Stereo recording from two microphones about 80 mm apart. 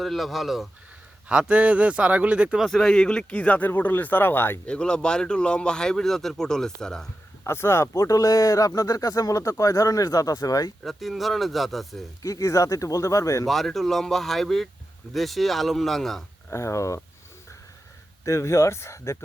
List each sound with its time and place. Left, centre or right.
0.0 s speech: centre
1.3 s a man's voice: centre
2.6 s speech: centre; by 4.6 s left
4.6 s speech: centre
7.4 s speech: left
10.8 s speech: centre
12.2 s speech: left
13.5 s speech: centre
16.5 s speech: left
18.3 s speech: left